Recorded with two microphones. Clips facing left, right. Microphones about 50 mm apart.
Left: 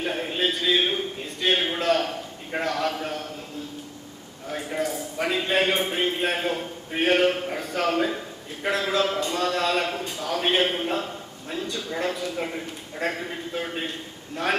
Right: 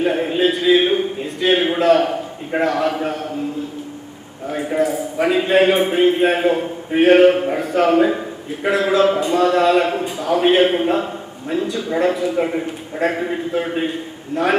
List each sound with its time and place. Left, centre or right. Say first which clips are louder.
0.0 s a man's voice: right 9 dB; centre
4.4 s a man's voice: right 9 dB; centre
14.4 s a man's voice: right 8 dB; centre